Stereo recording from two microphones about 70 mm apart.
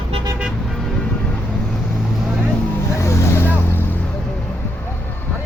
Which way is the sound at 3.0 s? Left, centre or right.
Left.